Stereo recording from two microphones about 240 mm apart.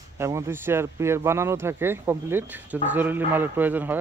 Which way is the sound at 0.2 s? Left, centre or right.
Centre.